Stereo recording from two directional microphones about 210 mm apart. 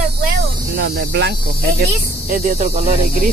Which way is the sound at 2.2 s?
40° right (ahead or behind).